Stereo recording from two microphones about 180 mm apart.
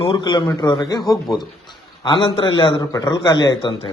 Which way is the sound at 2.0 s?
25° left (ahead or behind).